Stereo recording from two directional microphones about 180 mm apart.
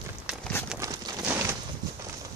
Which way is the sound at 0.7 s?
15° right (ahead or behind).